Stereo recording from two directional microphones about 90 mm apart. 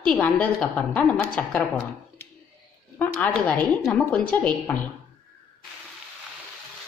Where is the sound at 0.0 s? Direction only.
15° left (ahead or behind).